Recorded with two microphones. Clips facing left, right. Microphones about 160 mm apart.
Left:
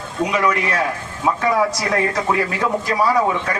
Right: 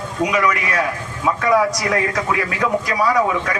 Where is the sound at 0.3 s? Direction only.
30° left (ahead or behind).